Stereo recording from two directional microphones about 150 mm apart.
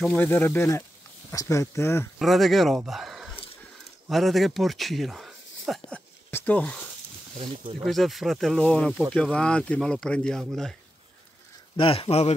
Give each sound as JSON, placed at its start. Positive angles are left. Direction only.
{"t": 0.2, "sound": "speech", "side_deg": 15}
{"t": 2.1, "sound": "speech", "side_deg": 0}
{"t": 7.8, "sound": "speech", "side_deg": 0}
{"t": 11.7, "sound": "speech", "side_deg": 35}